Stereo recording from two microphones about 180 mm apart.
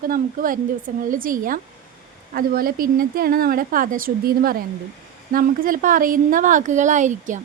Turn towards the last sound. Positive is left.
turn(degrees=-45)  # may be behind; listen again after turning